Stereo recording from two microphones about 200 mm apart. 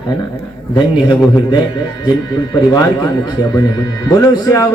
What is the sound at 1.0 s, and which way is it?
A man's voice, 20° left (ahead or behind).